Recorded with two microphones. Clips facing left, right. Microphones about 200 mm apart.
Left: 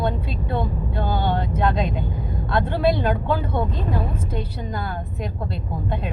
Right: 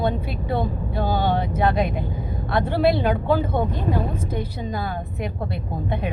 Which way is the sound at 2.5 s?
10° right (ahead or behind).